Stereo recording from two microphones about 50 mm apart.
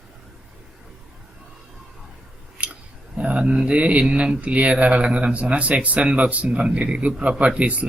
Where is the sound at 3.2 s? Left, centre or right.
Right.